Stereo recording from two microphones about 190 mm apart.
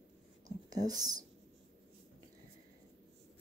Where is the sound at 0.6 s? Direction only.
20° right (ahead or behind).